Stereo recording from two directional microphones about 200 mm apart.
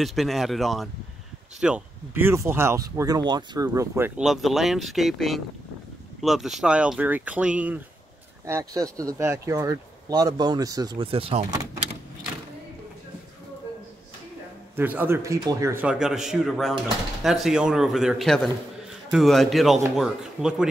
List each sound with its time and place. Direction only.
0.0 s speech: centre (ahead or behind); by 4.1 s 15° right (ahead or behind)
4.2 s speech: centre (ahead or behind); by 11.6 s 25° right (ahead or behind)
14.8 s speech: 10° right (ahead or behind)